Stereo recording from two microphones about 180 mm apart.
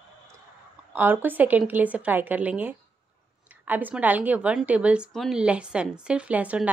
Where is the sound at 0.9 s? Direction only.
10° right (ahead or behind).